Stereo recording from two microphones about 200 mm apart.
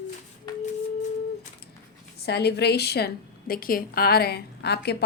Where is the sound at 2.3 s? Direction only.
55° left (ahead or behind).